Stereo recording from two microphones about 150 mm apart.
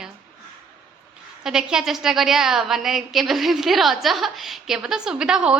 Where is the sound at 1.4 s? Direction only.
5° right (ahead or behind).